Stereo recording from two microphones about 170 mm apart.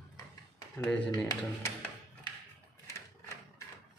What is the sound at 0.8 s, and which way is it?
Speech, 10° left (ahead or behind).